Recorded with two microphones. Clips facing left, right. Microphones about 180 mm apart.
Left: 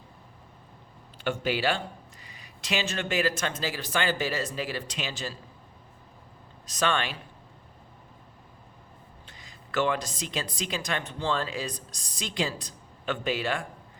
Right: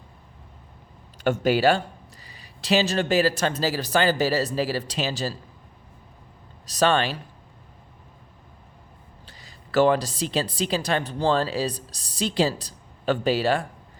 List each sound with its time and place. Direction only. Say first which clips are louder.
1.2 s a woman's voice: right 8 dB; 40° right (ahead or behind)
6.7 s a woman's voice: right 7 dB; 35° right (ahead or behind)
9.2 s a woman's voice: right 1 dB; 35° right (ahead or behind)